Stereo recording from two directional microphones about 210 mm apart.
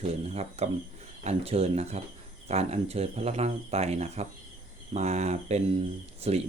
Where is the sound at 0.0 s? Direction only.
30° right (ahead or behind).